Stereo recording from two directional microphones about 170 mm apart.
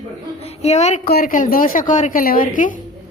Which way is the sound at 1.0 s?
60° left (ahead or behind).